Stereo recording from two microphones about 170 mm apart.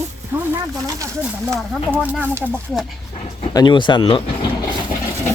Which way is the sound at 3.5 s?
25° left (ahead or behind).